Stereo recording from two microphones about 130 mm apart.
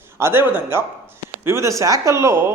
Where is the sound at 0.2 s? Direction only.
20° right (ahead or behind).